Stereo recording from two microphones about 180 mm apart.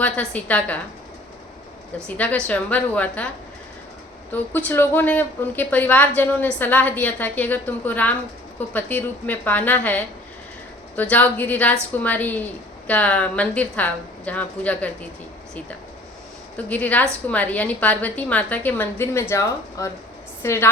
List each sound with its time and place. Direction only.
0.0 s a woman's voice: 10° left (ahead or behind)
2.1 s a woman's voice: 10° left (ahead or behind)
4.3 s a woman's voice: 10° left (ahead or behind)
16.6 s a woman's voice: 10° left (ahead or behind)